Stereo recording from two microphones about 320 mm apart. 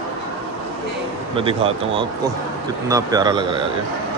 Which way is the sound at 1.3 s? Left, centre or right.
Centre.